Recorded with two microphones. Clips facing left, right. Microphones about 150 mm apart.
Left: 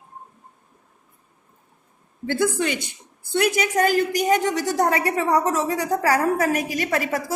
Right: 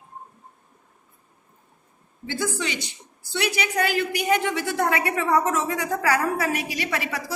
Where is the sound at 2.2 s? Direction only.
55° left (ahead or behind).